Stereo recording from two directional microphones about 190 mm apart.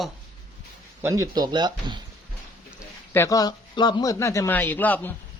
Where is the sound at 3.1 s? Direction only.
15° left (ahead or behind).